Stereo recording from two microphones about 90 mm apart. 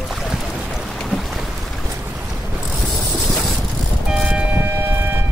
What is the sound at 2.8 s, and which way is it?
Mechanisms, centre (ahead or behind).